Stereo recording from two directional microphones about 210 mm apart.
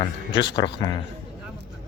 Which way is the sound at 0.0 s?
20° left (ahead or behind).